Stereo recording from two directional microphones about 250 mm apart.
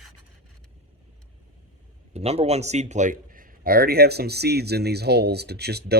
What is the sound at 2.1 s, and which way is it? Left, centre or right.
A man's voice, right.